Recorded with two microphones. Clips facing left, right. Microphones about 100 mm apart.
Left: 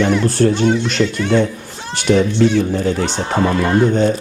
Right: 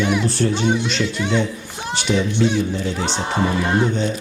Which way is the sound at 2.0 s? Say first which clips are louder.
Left 6 dB; 50° left (ahead or behind).